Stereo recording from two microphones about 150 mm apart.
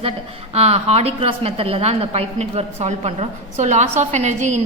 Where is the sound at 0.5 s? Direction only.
45° right (ahead or behind).